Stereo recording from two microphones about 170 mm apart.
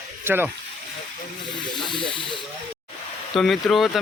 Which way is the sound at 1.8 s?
30° left (ahead or behind).